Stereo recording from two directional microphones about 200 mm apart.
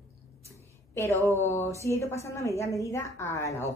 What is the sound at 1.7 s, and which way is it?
A woman's voice, 15° left (ahead or behind).